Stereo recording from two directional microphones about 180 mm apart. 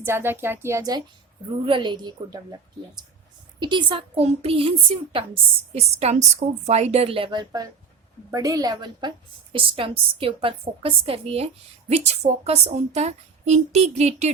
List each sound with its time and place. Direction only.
0.0 s a woman's voice: 15° right (ahead or behind); by 14.3 s 40° right (ahead or behind)